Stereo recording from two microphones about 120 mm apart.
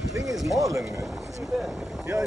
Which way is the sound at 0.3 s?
Centre (ahead or behind).